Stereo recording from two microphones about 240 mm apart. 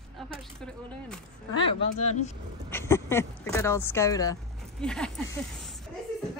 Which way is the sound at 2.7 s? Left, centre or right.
Centre.